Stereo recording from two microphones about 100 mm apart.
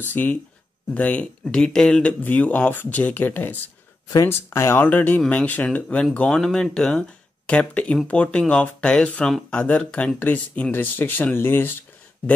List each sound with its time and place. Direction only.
0.0 s speech: 20° left (ahead or behind)